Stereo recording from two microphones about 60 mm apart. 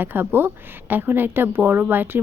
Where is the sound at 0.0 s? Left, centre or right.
Right.